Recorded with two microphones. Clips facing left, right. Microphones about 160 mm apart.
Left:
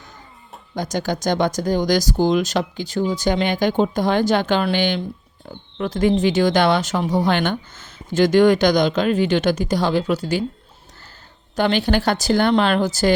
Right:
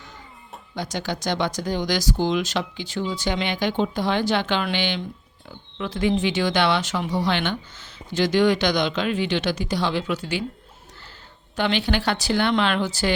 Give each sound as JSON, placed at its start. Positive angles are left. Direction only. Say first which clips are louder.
{"t": 0.8, "sound": "speech", "louder": "left 5 dB", "side_deg": 45}
{"t": 11.5, "sound": "speech", "louder": "left 4 dB", "side_deg": 40}